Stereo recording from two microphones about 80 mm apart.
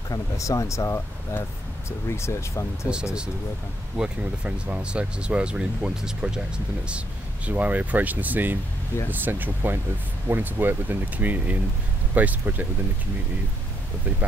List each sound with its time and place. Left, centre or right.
0.1 s speech: left
3.9 s speech: centre